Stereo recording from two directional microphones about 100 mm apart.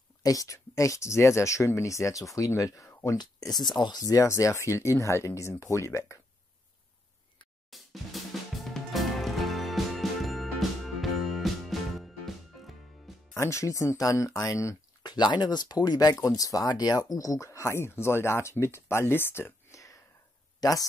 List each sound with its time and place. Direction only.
0.2 s speech: 35° left (ahead or behind)
3.2 s speech: 40° left (ahead or behind)
7.7 s drum: centre (ahead or behind)
8.6 s music: centre (ahead or behind)
13.3 s speech: 30° left (ahead or behind)
15.0 s speech: 45° left (ahead or behind)